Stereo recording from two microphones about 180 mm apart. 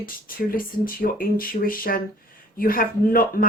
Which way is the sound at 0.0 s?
50° left (ahead or behind).